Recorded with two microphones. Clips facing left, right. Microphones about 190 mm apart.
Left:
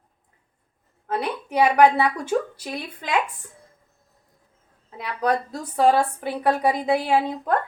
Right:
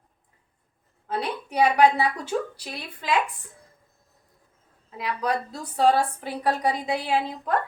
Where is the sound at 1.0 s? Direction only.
55° left (ahead or behind).